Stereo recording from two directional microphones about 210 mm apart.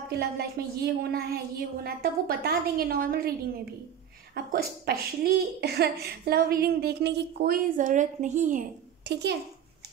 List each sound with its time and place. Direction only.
0.1 s a woman's voice: 50° right (ahead or behind)
9.0 s a child's voice: 55° right (ahead or behind)